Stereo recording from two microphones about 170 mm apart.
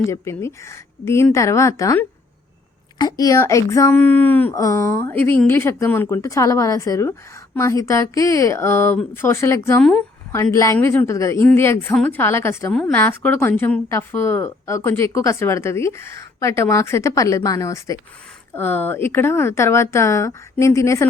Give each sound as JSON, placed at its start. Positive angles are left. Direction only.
{"t": 0.0, "sound": "a woman's voice", "side_deg": 15}